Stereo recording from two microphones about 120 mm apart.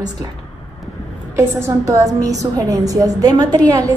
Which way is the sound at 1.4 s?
20° right (ahead or behind).